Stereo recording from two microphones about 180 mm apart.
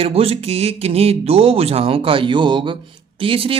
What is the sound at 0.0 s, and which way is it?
A man's voice, 35° right (ahead or behind).